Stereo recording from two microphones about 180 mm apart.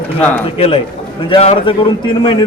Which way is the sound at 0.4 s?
30° left (ahead or behind).